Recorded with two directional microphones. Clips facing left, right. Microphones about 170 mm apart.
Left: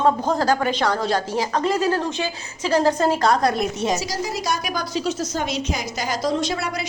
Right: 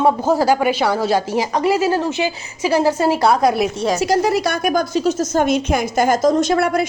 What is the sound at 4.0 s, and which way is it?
A woman's voice, 60° right (ahead or behind).